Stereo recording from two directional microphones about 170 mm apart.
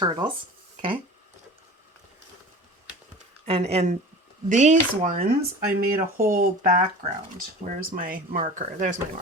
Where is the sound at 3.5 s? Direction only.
35° right (ahead or behind).